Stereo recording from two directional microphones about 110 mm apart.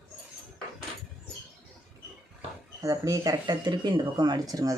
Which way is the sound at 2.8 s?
30° right (ahead or behind).